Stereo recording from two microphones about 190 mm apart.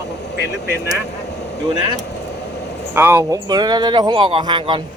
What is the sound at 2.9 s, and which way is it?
Speech, 10° right (ahead or behind).